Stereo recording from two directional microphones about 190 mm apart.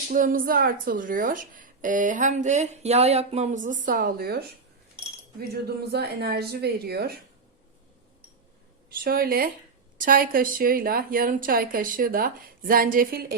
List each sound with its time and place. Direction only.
0.1 s speech: 45° right (ahead or behind)
9.0 s speech: 50° right (ahead or behind)